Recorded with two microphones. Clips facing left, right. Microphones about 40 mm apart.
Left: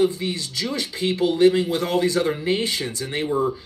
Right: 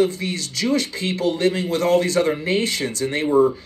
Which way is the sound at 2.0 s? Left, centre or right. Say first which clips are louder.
Right 1 dB; right.